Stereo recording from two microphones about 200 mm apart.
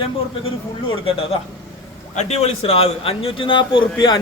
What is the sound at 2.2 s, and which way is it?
A man's voice, 30° left (ahead or behind).